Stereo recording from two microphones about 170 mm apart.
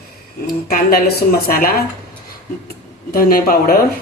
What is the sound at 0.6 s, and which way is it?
Speech, 60° left (ahead or behind).